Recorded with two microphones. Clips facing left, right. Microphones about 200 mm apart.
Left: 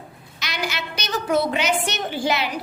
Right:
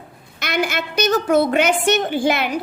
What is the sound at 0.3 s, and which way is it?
A woman's voice, 55° right (ahead or behind).